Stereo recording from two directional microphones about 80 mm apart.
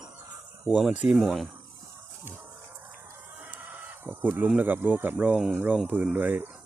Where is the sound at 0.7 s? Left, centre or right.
Centre.